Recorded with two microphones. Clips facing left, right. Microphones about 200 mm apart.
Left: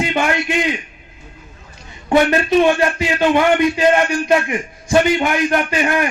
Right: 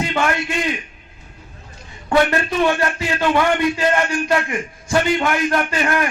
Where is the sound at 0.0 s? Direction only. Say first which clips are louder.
Left 2 dB; 20° left (ahead or behind).